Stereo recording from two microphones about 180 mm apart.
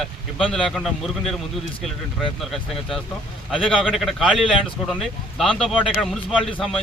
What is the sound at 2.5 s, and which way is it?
Speech, centre (ahead or behind).